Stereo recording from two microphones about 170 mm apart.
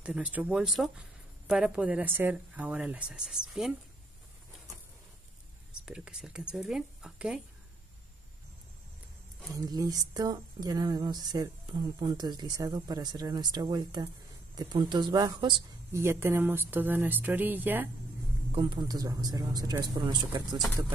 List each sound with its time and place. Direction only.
0.0 s speech: 10° right (ahead or behind)
5.7 s speech: 5° right (ahead or behind)
9.5 s speech: 20° right (ahead or behind)
15.9 s speech: 15° right (ahead or behind)
18.5 s speech: 30° right (ahead or behind)